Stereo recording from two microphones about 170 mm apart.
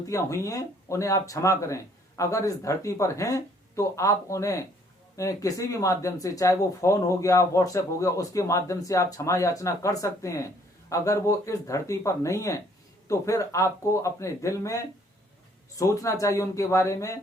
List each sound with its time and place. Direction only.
0.1 s speech: 15° left (ahead or behind)